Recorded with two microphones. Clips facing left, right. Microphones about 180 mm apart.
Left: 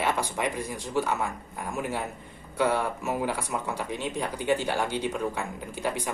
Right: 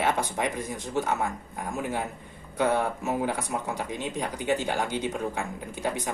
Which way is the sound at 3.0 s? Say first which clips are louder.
Right 1 dB; 20° right (ahead or behind).